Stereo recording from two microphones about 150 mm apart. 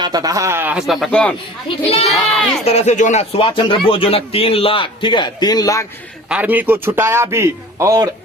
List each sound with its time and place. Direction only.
0.0 s speech: 25° right (ahead or behind); by 1.4 s 5° left (ahead or behind)
1.6 s speech: 40° left (ahead or behind)
2.0 s speech: centre (ahead or behind)
2.6 s speech: 50° left (ahead or behind); by 5.8 s 25° left (ahead or behind)
6.2 s speech: 10° right (ahead or behind)